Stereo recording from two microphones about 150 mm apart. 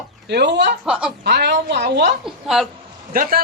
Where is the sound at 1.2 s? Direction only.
90° right.